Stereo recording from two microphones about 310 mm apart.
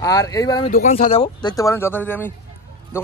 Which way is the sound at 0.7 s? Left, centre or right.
Left.